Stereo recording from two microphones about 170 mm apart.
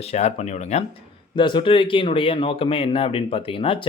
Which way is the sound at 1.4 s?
30° left (ahead or behind).